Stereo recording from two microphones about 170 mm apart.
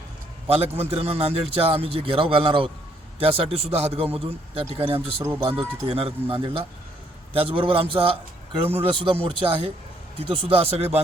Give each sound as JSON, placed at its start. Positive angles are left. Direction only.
{"t": 0.4, "sound": "a man's voice", "side_deg": -35}
{"t": 4.9, "sound": "speech", "side_deg": -15}
{"t": 5.5, "sound": "a man's voice", "side_deg": -35}